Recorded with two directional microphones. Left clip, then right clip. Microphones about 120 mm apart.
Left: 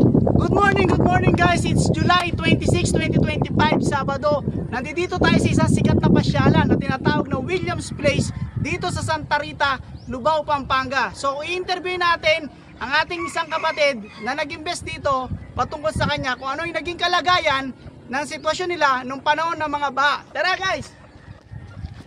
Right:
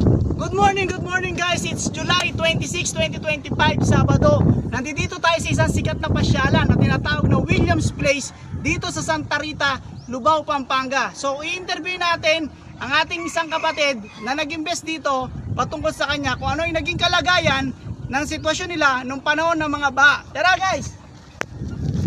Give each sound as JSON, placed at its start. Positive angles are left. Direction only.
{"t": 0.4, "sound": "speech", "side_deg": 20}